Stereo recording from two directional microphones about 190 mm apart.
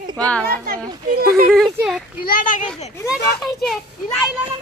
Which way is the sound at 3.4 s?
Centre (ahead or behind).